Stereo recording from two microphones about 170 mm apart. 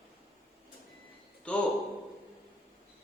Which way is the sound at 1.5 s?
5° left (ahead or behind).